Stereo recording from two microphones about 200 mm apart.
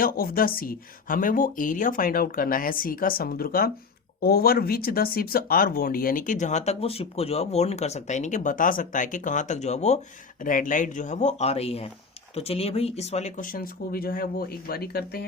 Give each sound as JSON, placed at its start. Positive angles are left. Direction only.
{"t": 0.0, "sound": "speech", "side_deg": 45}